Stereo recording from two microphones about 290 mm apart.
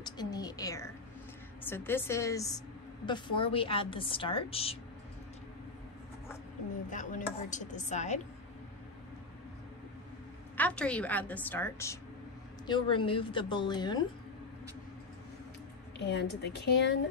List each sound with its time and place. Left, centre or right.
0.0 s a sound: centre
1.6 s a woman's voice: centre
6.9 s a woman's voice: left
10.6 s a woman's voice: centre
16.0 s a woman's voice: left